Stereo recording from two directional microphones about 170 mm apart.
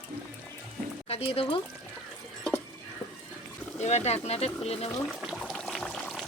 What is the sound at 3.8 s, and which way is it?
Speech, 40° left (ahead or behind).